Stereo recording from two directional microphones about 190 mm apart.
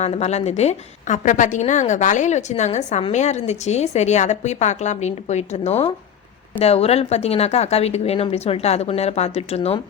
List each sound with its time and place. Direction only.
0.0 s a woman's voice: 35° left (ahead or behind)